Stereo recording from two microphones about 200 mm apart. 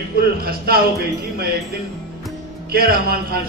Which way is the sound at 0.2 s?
50° right (ahead or behind).